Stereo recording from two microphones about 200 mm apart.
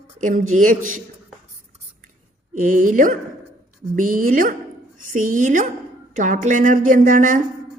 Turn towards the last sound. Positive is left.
turn(degrees=-40)  # may be behind; listen again after turning